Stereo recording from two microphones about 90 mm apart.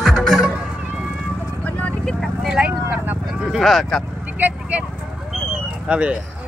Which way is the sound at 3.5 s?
Centre (ahead or behind).